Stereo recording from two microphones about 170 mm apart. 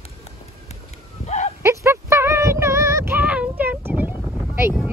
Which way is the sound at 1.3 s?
40° left (ahead or behind).